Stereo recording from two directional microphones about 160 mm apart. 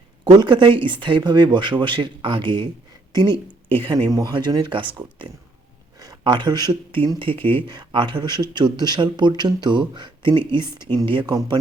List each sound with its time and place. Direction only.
0.3 s speech: 30° right (ahead or behind)